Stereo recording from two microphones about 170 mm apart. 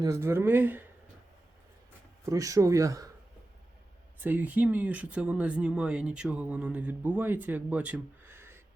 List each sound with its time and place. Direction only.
0.0 s speech: 15° right (ahead or behind)
2.2 s speech: 20° right (ahead or behind)
4.2 s speech: 10° right (ahead or behind)